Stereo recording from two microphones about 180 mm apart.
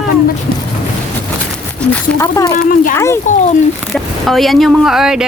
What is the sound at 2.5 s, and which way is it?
Speech, 50° left (ahead or behind).